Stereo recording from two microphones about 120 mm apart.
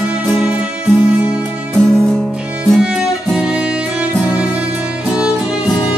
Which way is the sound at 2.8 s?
5° right (ahead or behind).